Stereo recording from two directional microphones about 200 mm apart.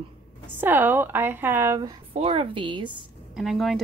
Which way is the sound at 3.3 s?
Centre (ahead or behind).